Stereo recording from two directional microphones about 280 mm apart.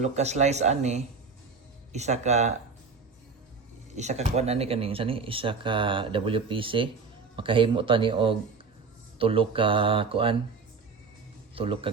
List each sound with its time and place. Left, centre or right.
0.0 s speech: right
3.9 s speech: right
11.5 s speech: centre